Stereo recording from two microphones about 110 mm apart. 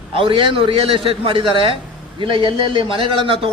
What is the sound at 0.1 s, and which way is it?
A man's voice, 55° right (ahead or behind).